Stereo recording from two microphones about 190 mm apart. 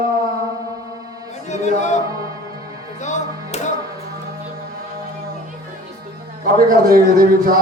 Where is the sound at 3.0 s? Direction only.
40° left (ahead or behind).